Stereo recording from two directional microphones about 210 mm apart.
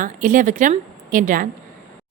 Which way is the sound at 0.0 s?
40° right (ahead or behind).